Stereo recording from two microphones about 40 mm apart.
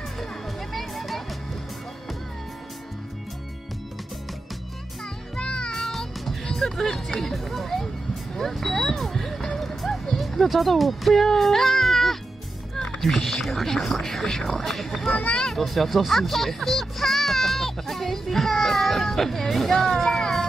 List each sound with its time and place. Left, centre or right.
0.2 s music: centre
5.3 s music: left
5.8 s music: centre
6.5 s speech: centre
8.4 s vehicle: centre
12.7 s a sound: centre
13.3 s speech: centre
20.1 s music: centre